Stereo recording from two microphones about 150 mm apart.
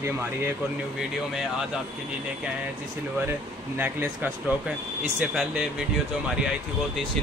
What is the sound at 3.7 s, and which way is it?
Speech, 10° right (ahead or behind).